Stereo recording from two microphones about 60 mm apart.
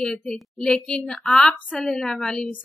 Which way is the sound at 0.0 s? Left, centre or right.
Centre.